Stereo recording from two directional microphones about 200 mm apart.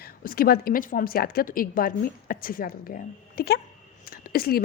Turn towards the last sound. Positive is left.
turn(degrees=50)  # may be behind; listen again after turning